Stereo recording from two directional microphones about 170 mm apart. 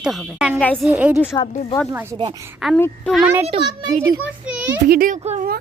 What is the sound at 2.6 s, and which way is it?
Speech, centre (ahead or behind).